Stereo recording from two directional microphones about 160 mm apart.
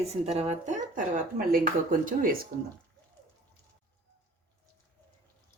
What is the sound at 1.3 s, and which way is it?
Speech, 60° right (ahead or behind).